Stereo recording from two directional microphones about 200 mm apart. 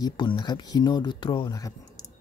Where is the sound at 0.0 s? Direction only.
25° left (ahead or behind).